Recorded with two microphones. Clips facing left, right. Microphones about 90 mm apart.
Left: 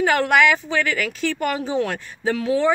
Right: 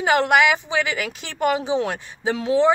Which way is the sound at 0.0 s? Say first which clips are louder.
Even; 15° right (ahead or behind).